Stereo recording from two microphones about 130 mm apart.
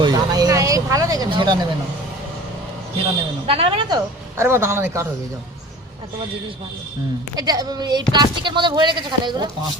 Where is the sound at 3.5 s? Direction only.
45° right (ahead or behind).